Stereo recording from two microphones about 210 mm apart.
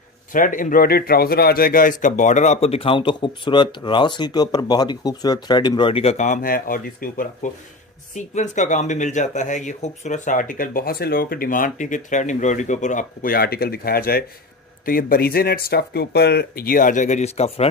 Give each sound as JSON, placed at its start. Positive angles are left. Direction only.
{"t": 0.3, "sound": "a man's voice", "side_deg": 40}